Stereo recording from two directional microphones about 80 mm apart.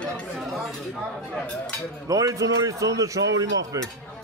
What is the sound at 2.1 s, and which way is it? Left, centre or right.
A man's voice, right.